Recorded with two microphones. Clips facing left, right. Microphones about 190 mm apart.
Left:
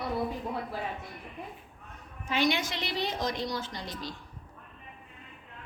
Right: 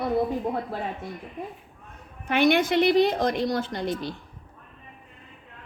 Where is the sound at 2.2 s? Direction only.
60° right (ahead or behind).